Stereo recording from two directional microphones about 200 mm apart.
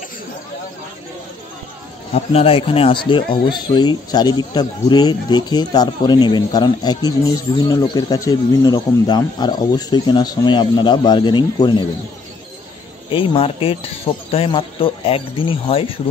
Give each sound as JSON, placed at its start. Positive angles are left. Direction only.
{"t": 2.1, "sound": "speech", "side_deg": 30}
{"t": 13.1, "sound": "speech", "side_deg": 25}